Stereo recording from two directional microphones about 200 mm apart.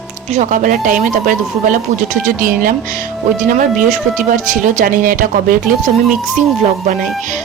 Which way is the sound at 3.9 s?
40° right (ahead or behind).